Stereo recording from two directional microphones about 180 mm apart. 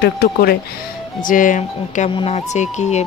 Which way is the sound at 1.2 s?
50° left (ahead or behind).